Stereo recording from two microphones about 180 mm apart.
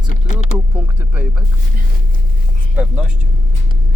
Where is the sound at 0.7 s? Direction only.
10° right (ahead or behind).